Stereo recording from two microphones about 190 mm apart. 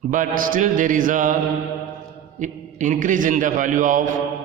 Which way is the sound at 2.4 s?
40° right (ahead or behind).